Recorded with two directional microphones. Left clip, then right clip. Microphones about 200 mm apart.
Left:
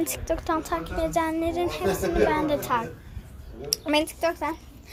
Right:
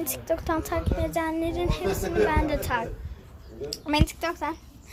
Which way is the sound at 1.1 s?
5° left (ahead or behind).